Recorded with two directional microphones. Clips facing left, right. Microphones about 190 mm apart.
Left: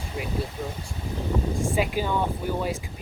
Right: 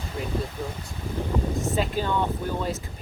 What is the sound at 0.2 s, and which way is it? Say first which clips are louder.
Speech: even; 10° left (ahead or behind).